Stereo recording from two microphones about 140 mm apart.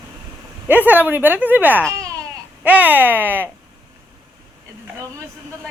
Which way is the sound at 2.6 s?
10° right (ahead or behind).